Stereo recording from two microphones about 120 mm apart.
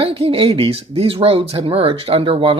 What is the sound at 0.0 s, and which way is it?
Speech, 50° right (ahead or behind).